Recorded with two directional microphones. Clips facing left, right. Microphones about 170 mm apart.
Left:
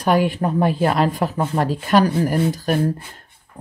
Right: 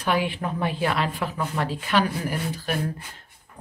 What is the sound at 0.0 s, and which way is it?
Speech, 45° left (ahead or behind).